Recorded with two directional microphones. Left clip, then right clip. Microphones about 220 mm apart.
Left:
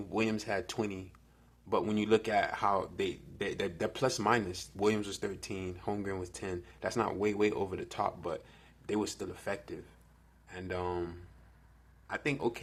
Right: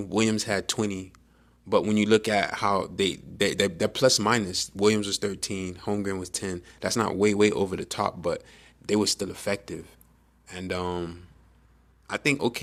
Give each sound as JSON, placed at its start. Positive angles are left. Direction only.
{"t": 0.0, "sound": "a man's voice", "side_deg": -40}